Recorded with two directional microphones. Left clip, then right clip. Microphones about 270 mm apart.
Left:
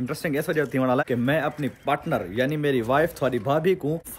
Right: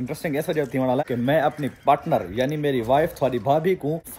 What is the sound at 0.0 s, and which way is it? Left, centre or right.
A man's voice, centre.